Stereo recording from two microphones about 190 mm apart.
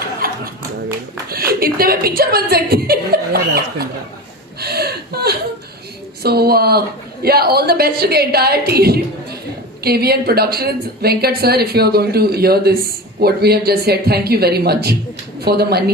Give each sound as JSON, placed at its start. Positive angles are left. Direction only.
{"t": 0.2, "sound": "clapping", "side_deg": -50}
{"t": 1.3, "sound": "a woman's voice", "side_deg": -50}
{"t": 4.6, "sound": "chuckle", "side_deg": -55}
{"t": 6.2, "sound": "a woman's voice", "side_deg": -55}